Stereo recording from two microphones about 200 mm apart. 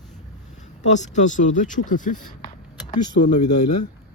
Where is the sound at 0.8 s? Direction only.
35° left (ahead or behind).